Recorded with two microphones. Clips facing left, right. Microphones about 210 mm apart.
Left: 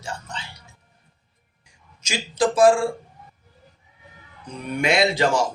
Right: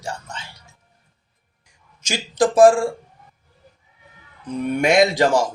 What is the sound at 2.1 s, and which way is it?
Mantra, 50° right (ahead or behind).